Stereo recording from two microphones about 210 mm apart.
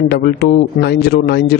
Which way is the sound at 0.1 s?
50° left (ahead or behind).